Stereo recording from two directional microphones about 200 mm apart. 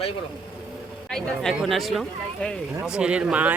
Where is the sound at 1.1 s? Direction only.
Centre (ahead or behind).